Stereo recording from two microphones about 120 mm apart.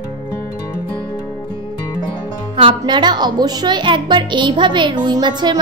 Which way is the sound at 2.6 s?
40° right (ahead or behind).